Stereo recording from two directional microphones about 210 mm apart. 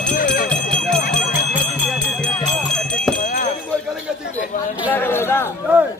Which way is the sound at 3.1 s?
40° left (ahead or behind).